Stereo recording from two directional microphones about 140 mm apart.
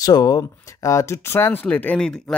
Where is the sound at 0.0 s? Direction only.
30° left (ahead or behind).